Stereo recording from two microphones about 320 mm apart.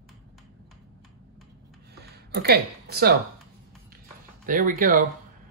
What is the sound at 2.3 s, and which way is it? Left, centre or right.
Speech, right.